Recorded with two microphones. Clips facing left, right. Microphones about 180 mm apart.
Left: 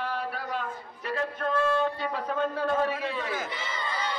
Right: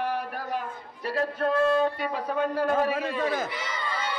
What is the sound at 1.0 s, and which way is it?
Speech, 35° right (ahead or behind).